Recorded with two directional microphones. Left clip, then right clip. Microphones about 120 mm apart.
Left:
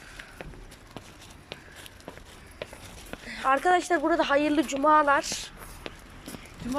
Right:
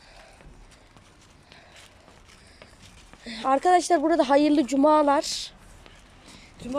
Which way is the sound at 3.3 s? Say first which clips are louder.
Right 2 dB; 40° right (ahead or behind).